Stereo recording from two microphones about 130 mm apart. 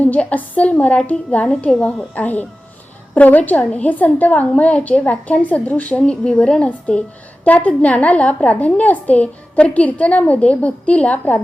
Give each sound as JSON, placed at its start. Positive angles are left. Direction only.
{"t": 0.0, "sound": "a woman's voice", "side_deg": 10}